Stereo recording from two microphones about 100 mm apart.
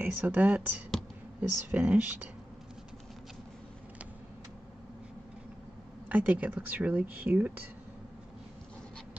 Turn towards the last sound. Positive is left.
turn(degrees=-15)  # may be behind; listen again after turning